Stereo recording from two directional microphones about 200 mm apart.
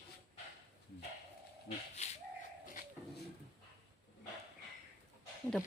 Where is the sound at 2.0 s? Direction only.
35° left (ahead or behind).